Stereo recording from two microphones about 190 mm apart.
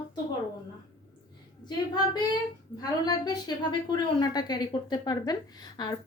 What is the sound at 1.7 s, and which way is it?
A woman's voice, 25° left (ahead or behind).